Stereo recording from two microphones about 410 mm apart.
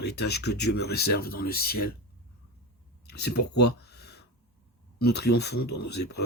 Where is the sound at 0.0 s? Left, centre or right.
Left.